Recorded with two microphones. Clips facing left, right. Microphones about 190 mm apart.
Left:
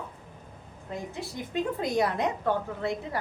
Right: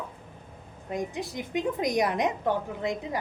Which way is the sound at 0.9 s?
15° right (ahead or behind).